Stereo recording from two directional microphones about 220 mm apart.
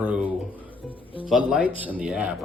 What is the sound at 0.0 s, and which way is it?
Music, 5° right (ahead or behind).